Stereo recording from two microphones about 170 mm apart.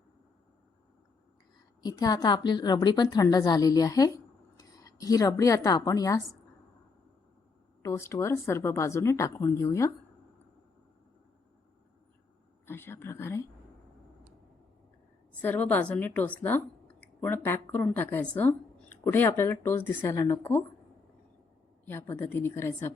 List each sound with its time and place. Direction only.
1.8 s a woman's voice: 25° left (ahead or behind)
7.8 s a woman's voice: 15° left (ahead or behind)
12.6 s a woman's voice: 15° left (ahead or behind)
15.4 s a woman's voice: 10° left (ahead or behind)
21.8 s a woman's voice: 15° left (ahead or behind)